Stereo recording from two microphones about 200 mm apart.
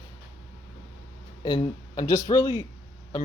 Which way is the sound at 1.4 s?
20° left (ahead or behind).